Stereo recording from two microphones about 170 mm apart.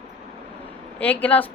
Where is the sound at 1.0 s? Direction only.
10° left (ahead or behind).